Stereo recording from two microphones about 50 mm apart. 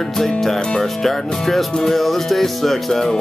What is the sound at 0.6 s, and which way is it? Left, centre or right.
Speech, centre.